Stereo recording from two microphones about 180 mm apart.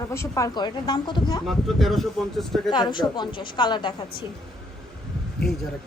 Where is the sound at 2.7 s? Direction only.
25° left (ahead or behind).